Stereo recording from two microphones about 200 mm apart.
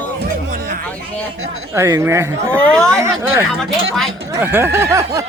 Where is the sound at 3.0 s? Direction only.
15° right (ahead or behind).